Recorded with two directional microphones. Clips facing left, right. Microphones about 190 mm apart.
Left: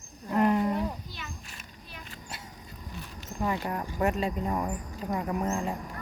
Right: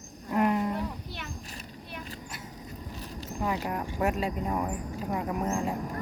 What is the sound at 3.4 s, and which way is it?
Speech, 5° right (ahead or behind).